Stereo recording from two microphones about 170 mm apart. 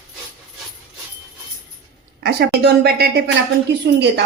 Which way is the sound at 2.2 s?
70° right (ahead or behind).